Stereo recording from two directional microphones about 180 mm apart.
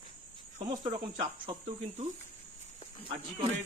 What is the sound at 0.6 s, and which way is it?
Cricket, 25° right (ahead or behind).